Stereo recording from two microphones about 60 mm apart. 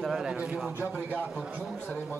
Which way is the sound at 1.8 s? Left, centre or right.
Left.